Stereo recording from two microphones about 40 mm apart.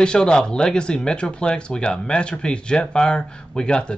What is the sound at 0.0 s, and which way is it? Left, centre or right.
Speech, left.